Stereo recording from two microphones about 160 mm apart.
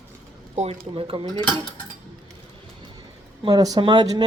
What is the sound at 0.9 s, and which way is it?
Speech, 35° right (ahead or behind).